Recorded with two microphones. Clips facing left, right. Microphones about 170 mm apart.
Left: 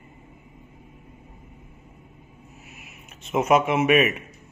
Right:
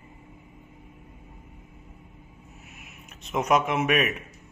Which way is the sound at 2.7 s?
Centre (ahead or behind).